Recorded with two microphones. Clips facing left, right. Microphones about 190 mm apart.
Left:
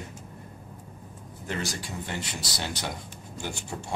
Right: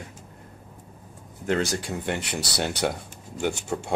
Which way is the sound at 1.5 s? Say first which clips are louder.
Right 6 dB; 65° right (ahead or behind).